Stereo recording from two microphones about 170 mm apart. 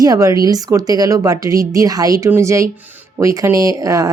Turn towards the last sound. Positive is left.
turn(degrees=-20)  # may be behind; listen again after turning